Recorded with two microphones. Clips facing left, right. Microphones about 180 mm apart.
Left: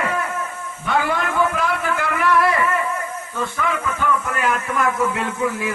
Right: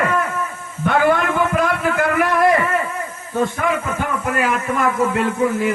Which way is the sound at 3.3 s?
45° right (ahead or behind).